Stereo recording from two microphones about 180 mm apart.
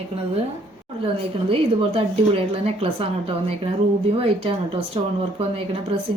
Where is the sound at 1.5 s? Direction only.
30° right (ahead or behind).